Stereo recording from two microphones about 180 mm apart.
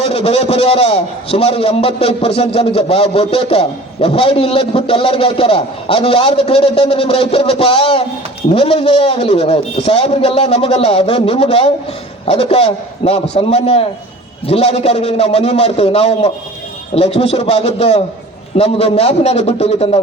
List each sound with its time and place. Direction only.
0.0 s a man's voice: 35° left (ahead or behind)